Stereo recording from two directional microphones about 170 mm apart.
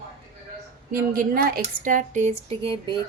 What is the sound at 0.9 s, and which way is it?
Speech, 55° right (ahead or behind).